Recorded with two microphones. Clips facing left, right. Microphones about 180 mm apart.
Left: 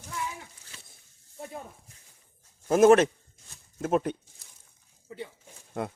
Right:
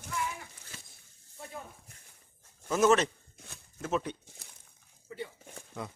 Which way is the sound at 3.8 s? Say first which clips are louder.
Left 6 dB; 50° left (ahead or behind).